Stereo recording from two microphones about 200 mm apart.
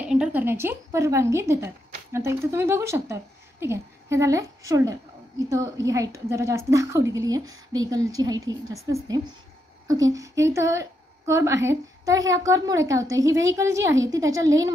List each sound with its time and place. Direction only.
0.0 s a woman's voice: 5° right (ahead or behind)